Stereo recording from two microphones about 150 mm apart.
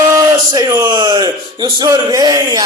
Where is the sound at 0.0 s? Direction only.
25° right (ahead or behind).